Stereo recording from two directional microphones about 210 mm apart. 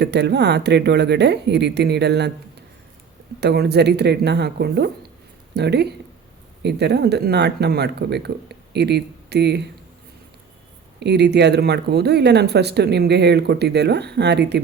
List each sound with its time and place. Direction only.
0.0 s speech: 55° right (ahead or behind)
3.4 s speech: 50° right (ahead or behind)
11.0 s speech: 55° right (ahead or behind)